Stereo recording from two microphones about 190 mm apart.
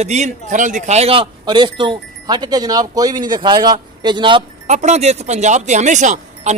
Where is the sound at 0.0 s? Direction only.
35° right (ahead or behind).